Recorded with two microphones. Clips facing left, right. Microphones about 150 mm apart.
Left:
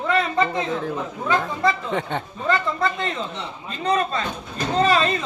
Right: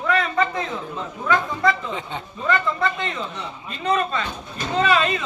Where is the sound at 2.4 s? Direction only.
35° left (ahead or behind).